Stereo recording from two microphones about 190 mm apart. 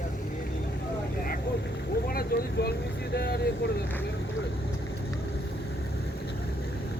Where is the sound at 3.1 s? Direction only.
60° left (ahead or behind).